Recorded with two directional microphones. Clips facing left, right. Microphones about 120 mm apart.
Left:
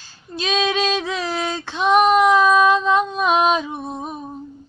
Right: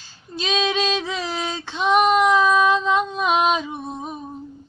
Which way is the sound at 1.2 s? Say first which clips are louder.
Left 3 dB; 50° left (ahead or behind).